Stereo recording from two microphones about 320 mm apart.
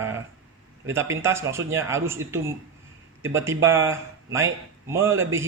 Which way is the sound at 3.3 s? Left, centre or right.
Centre.